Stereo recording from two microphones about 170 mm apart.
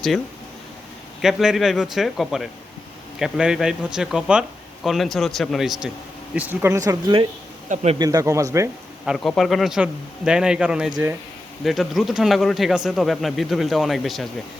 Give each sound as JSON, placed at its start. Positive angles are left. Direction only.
{"t": 1.2, "sound": "speech", "side_deg": 0}
{"t": 7.7, "sound": "speech", "side_deg": -45}
{"t": 7.9, "sound": "speech", "side_deg": -20}
{"t": 9.0, "sound": "speech", "side_deg": 0}